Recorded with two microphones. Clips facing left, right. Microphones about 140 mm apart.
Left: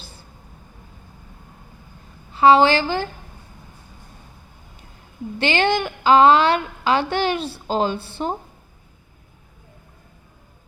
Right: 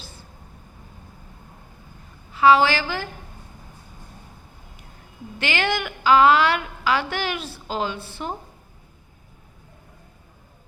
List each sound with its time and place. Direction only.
2.3 s a woman's voice: 30° left (ahead or behind)
5.4 s a woman's voice: 30° left (ahead or behind)